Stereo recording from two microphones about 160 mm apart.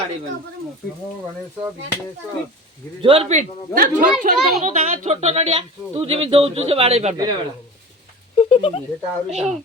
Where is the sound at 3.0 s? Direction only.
35° right (ahead or behind).